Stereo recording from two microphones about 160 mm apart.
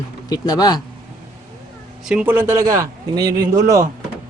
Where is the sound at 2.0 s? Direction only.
10° right (ahead or behind).